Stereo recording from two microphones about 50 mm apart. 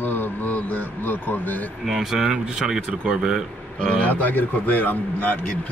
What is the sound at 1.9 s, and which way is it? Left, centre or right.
Speech, centre.